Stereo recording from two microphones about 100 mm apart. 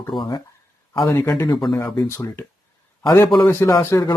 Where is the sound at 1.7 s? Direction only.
30° left (ahead or behind).